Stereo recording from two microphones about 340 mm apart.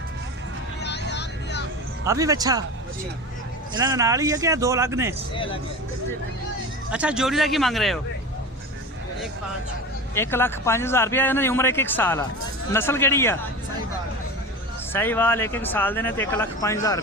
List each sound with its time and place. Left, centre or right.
0.8 s vehicle: left
2.0 s speech: centre
3.8 s speech: centre
5.3 s speech: centre
6.9 s speech: centre
10.2 s speech: centre
14.9 s speech: centre